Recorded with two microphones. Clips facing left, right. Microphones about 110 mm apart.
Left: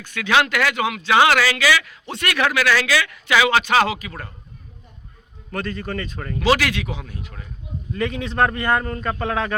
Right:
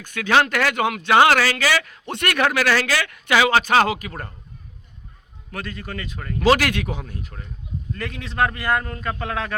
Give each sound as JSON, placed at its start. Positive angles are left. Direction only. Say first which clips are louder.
{"t": 0.0, "sound": "speech", "louder": "right 1 dB", "side_deg": -45}
{"t": 5.5, "sound": "a man's voice", "louder": "left 5 dB", "side_deg": -5}
{"t": 6.4, "sound": "speech", "louder": "right 1 dB", "side_deg": -45}
{"t": 7.9, "sound": "a man's voice", "louder": "left 4 dB", "side_deg": 0}